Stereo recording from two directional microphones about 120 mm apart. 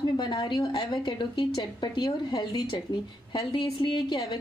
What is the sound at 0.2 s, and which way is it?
Speech, 40° left (ahead or behind).